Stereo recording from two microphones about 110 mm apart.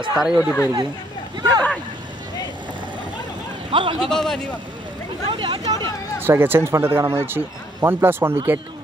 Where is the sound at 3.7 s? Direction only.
50° right (ahead or behind).